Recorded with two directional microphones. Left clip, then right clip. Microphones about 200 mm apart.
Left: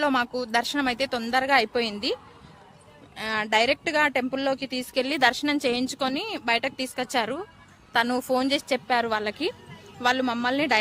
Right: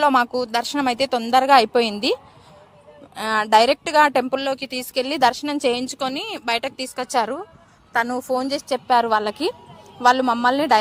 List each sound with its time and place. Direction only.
0.0 s a woman's voice: 15° right (ahead or behind)
3.2 s a woman's voice: 20° right (ahead or behind)
5.0 s a woman's voice: 10° right (ahead or behind)
8.3 s a woman's voice: centre (ahead or behind)